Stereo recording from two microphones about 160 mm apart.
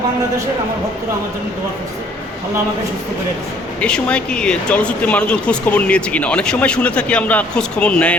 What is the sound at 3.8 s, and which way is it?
Speech, 5° left (ahead or behind).